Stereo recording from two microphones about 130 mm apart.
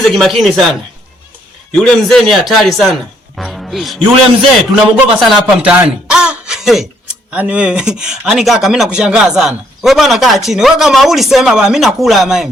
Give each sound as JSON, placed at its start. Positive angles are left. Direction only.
{"t": 0.1, "sound": "speech", "side_deg": 0}
{"t": 4.7, "sound": "speech", "side_deg": -10}